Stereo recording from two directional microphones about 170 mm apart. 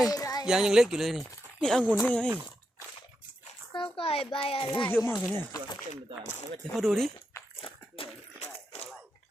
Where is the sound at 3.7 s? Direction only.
30° left (ahead or behind).